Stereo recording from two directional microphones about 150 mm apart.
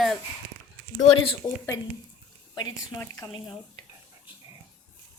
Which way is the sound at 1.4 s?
25° left (ahead or behind).